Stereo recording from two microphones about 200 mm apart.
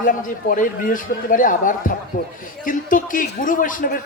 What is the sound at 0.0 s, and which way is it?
A man's voice, 45° left (ahead or behind).